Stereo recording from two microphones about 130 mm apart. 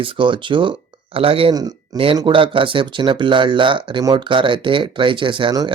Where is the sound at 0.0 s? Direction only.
40° right (ahead or behind).